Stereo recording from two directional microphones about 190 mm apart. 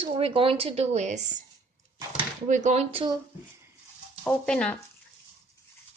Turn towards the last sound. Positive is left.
turn(degrees=5)  # may be behind; listen again after turning